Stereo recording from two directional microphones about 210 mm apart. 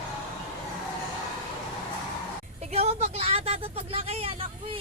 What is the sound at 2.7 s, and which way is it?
Speech, 30° right (ahead or behind).